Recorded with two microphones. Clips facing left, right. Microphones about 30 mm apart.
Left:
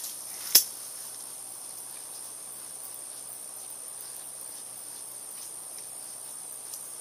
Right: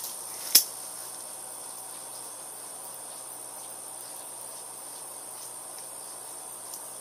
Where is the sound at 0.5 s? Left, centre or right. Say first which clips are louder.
Even; centre.